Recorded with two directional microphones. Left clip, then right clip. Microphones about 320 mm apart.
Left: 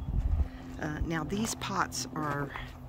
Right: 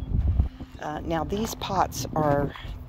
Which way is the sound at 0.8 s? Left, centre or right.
Centre.